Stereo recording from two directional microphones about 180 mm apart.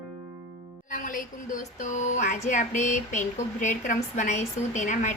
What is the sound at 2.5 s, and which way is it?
Speech, 40° left (ahead or behind).